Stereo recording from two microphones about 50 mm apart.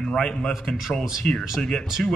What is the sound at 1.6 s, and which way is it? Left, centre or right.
Speech, centre.